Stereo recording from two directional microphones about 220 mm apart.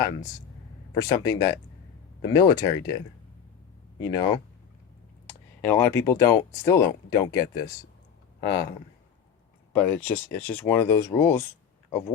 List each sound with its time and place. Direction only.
0.9 s speech: 15° left (ahead or behind)
4.0 s speech: 15° left (ahead or behind)
5.6 s speech: 10° left (ahead or behind)
8.4 s speech: 15° left (ahead or behind)
9.7 s speech: 5° left (ahead or behind)